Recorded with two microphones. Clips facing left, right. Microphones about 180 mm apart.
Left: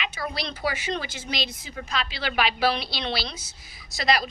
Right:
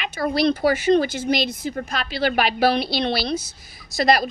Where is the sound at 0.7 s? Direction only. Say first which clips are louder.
Right 9 dB; 60° right (ahead or behind).